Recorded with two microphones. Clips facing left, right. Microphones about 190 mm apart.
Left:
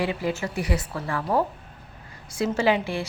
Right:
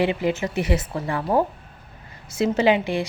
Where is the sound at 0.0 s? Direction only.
20° right (ahead or behind).